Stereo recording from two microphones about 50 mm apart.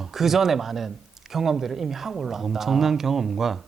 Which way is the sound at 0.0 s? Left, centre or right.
Centre.